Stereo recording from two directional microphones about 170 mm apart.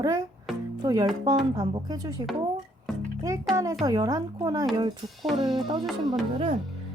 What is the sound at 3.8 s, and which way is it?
A woman's voice, 20° right (ahead or behind).